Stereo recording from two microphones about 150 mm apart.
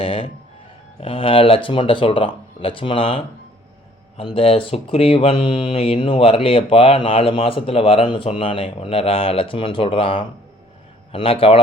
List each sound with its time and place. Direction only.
0.0 s speech: 35° left (ahead or behind)
4.4 s speech: 40° left (ahead or behind)